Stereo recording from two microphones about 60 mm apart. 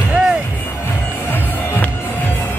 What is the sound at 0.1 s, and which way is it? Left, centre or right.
Music, centre.